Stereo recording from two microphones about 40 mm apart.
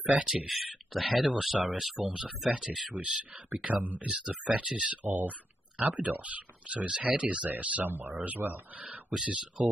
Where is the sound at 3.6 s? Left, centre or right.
Right.